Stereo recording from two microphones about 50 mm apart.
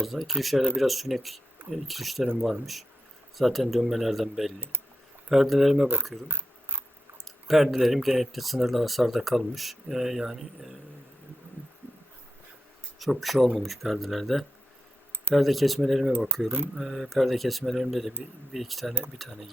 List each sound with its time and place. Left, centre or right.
0.0 s speech: centre
6.2 s camera: right
7.3 s speech: centre
13.0 s speech: centre